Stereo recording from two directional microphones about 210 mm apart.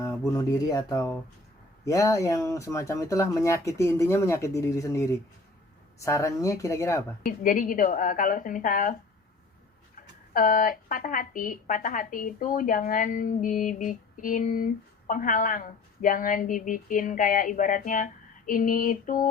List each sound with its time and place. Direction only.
0.3 s speech: 20° left (ahead or behind)
7.3 s a woman's voice: 40° left (ahead or behind)
10.3 s a woman's voice: 40° left (ahead or behind)